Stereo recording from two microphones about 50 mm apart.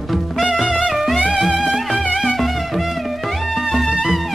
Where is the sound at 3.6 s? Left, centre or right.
Centre.